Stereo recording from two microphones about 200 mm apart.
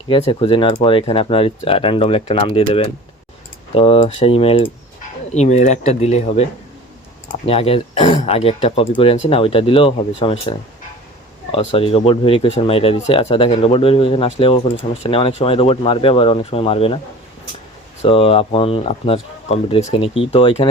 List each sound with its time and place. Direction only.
0.1 s speech: 25° left (ahead or behind)
11.5 s speech: 25° left (ahead or behind)
18.0 s speech: 30° left (ahead or behind)